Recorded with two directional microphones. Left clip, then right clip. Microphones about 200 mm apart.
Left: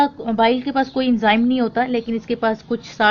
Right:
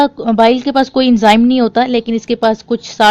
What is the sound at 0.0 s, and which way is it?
A woman's voice, 55° right (ahead or behind).